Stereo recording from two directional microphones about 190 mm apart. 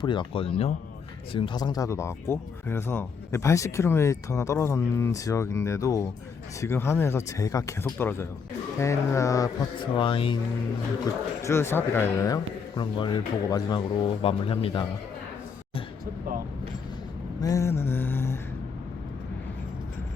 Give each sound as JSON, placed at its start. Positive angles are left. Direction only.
{"t": 0.0, "sound": "speech", "side_deg": 25}
{"t": 11.0, "sound": "speech", "side_deg": 15}
{"t": 17.4, "sound": "mantra", "side_deg": 15}